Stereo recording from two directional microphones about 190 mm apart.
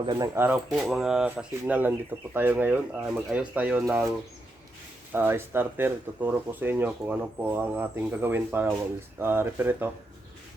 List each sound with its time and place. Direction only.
0.0 s speech: 25° right (ahead or behind)
0.3 s speech: 10° right (ahead or behind)
5.1 s speech: 10° right (ahead or behind)